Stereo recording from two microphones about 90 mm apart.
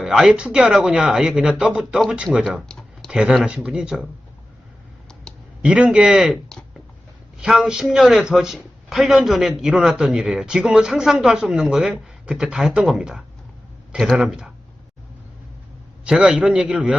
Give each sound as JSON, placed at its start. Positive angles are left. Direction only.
{"t": 0.0, "sound": "speech", "side_deg": -5}
{"t": 2.6, "sound": "computer keyboard", "side_deg": 5}
{"t": 3.1, "sound": "speech", "side_deg": -10}
{"t": 5.6, "sound": "speech", "side_deg": -10}
{"t": 7.4, "sound": "a man's voice", "side_deg": -5}
{"t": 16.0, "sound": "speech", "side_deg": -10}